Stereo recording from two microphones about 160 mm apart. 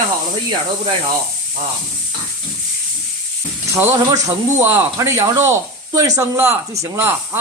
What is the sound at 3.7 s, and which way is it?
Speech, 15° right (ahead or behind).